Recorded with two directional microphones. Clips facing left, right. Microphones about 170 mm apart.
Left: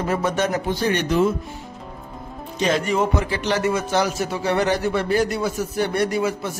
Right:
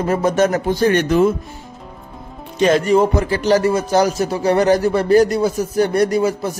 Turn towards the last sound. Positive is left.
turn(degrees=-40)  # may be behind; listen again after turning